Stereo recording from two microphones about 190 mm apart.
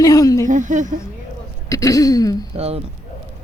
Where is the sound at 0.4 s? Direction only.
40° right (ahead or behind).